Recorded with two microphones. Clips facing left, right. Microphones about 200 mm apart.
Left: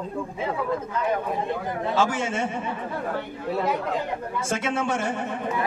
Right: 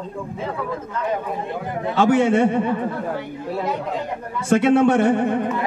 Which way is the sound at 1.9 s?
60° right (ahead or behind).